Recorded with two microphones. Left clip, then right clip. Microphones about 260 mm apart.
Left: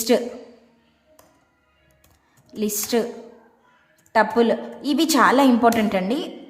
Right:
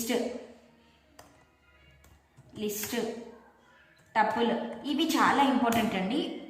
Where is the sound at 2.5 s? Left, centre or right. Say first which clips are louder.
Left 9 dB; centre.